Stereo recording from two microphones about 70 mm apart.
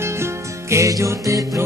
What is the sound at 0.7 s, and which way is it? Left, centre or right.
Music, right.